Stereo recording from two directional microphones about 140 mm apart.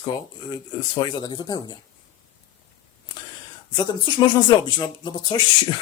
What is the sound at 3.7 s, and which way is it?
Speech, 30° left (ahead or behind).